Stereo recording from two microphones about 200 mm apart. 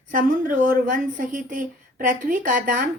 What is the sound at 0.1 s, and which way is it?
A woman's voice, 45° right (ahead or behind).